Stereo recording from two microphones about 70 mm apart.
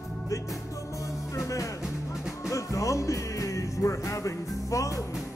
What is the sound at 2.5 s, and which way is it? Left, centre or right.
Music, left.